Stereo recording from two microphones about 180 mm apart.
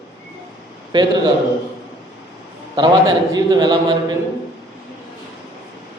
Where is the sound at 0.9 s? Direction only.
25° right (ahead or behind).